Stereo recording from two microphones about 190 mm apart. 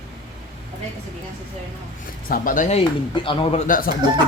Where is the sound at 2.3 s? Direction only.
45° left (ahead or behind); by 3.6 s 25° left (ahead or behind).